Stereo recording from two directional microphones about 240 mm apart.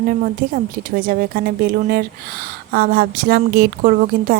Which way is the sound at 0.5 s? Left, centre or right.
Right.